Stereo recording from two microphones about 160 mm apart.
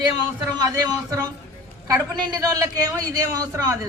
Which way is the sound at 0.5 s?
25° right (ahead or behind).